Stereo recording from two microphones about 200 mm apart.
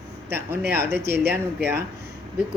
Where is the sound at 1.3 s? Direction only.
10° right (ahead or behind).